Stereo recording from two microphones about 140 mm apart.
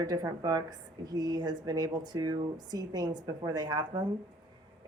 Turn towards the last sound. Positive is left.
turn(degrees=-30)  # may be behind; listen again after turning